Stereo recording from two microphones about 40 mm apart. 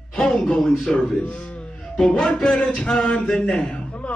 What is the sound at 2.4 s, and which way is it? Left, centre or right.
Speech, centre.